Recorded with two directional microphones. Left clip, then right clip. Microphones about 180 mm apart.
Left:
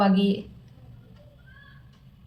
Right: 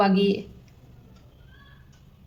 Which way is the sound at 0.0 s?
40° right (ahead or behind).